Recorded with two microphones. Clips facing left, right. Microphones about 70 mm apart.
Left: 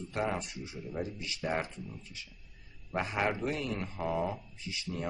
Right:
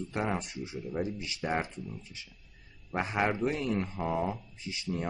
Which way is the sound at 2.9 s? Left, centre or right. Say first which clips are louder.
Right 2 dB; right.